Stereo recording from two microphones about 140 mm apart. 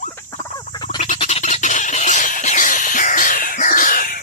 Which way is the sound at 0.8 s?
60° left (ahead or behind).